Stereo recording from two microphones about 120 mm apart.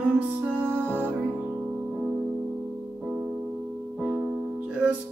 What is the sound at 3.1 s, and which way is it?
Music, 15° right (ahead or behind).